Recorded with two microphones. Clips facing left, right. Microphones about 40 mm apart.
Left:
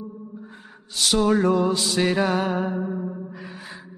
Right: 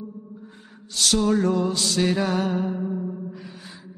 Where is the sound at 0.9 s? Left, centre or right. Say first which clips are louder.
Left 1 dB; centre.